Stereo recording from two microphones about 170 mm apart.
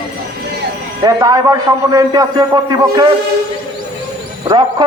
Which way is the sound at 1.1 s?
20° right (ahead or behind).